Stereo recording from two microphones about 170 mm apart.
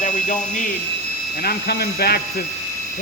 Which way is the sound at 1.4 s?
70° left (ahead or behind).